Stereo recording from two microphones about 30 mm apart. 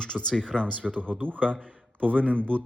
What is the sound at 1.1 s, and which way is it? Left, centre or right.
Speech, right.